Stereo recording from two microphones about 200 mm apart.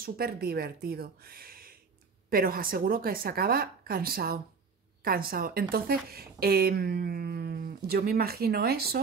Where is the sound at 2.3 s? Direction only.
45° right (ahead or behind).